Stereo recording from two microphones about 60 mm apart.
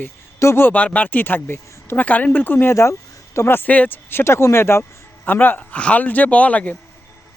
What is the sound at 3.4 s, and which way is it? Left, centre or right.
Speech, left.